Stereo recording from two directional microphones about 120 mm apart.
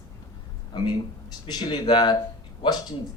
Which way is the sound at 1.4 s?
40° left (ahead or behind).